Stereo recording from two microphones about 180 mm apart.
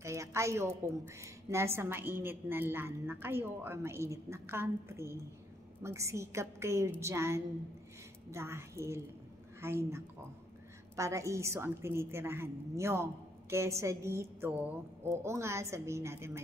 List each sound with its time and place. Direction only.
0.0 s a woman's voice: 15° right (ahead or behind)